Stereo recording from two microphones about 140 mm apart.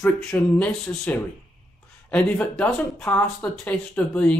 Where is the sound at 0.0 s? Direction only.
5° left (ahead or behind).